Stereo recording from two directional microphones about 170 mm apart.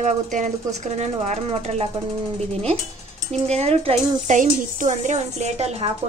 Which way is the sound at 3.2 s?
40° right (ahead or behind).